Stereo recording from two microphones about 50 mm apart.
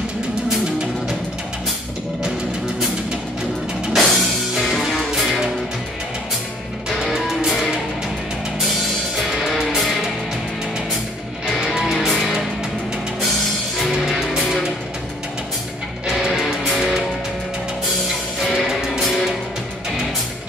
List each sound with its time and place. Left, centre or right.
3.9 s music: centre
6.9 s music: centre
9.6 s music: centre
11.8 s music: centre
14.2 s music: centre
16.1 s music: centre
18.7 s music: centre